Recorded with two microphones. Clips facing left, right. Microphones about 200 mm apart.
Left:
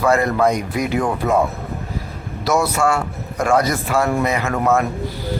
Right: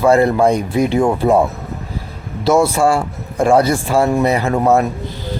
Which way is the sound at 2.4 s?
25° right (ahead or behind).